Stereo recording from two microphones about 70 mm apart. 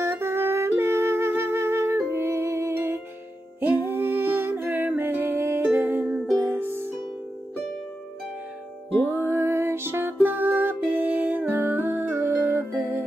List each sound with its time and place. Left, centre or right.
0.0 s music: right
9.2 s music: right